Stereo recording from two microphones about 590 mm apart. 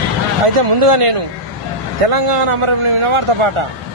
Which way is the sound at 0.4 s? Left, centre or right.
Right.